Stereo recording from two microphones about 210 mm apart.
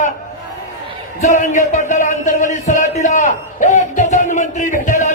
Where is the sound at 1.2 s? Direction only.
35° left (ahead or behind).